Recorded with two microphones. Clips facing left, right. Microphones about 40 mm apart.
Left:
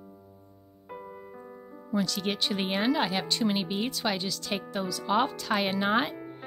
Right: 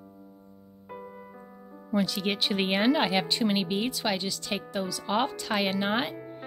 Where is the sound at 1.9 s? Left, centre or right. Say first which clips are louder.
Right 2 dB; centre.